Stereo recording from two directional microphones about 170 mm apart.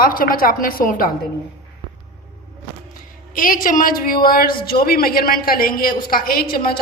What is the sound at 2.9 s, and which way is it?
A woman's voice, 55° left (ahead or behind).